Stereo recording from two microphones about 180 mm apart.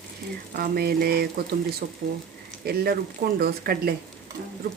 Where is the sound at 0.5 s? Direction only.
55° right (ahead or behind).